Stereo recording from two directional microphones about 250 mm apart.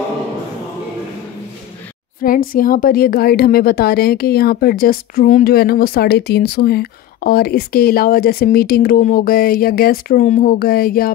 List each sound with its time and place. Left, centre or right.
2.5 s a woman's voice: left